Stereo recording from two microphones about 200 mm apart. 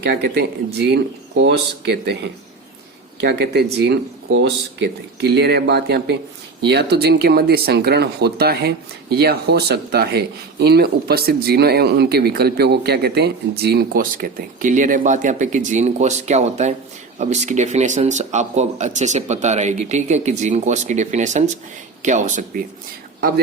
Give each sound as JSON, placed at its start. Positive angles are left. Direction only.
{"t": 0.0, "sound": "speech", "side_deg": -55}
{"t": 3.2, "sound": "speech", "side_deg": -55}
{"t": 4.3, "sound": "speech", "side_deg": -70}
{"t": 5.2, "sound": "a man's voice", "side_deg": -55}